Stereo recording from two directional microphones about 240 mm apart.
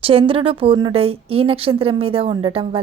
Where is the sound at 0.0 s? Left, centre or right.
Right.